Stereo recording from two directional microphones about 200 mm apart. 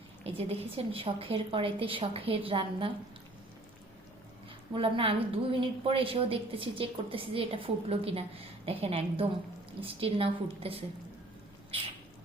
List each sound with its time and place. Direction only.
0.3 s a woman's voice: 30° right (ahead or behind)
4.7 s a woman's voice: 25° right (ahead or behind)